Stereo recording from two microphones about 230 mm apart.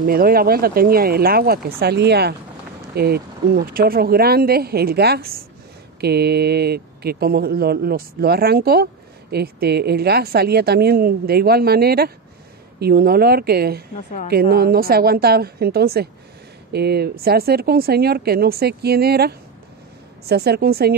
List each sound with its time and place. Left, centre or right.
0.0 s speech: right